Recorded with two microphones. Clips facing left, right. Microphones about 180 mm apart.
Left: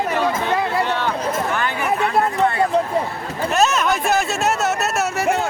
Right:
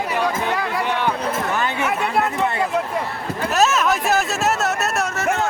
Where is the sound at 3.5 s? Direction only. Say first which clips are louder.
Even; centre (ahead or behind).